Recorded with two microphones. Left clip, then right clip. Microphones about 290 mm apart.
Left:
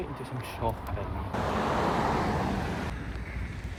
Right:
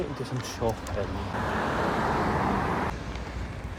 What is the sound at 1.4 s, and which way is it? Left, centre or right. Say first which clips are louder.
Vehicle: even; centre.